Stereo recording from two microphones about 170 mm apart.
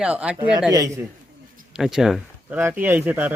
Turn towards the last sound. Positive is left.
turn(degrees=-10)  # may be behind; listen again after turning